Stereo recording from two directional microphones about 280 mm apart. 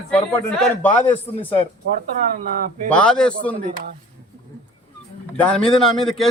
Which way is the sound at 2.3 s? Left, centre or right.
Right.